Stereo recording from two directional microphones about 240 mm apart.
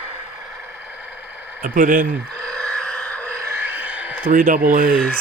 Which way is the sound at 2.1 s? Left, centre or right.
Centre.